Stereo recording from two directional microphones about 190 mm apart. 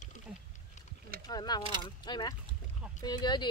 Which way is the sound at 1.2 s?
20° left (ahead or behind).